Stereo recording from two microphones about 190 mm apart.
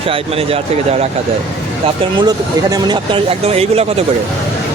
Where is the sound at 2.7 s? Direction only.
25° right (ahead or behind).